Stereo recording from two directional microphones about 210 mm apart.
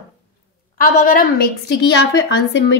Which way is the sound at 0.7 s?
40° left (ahead or behind).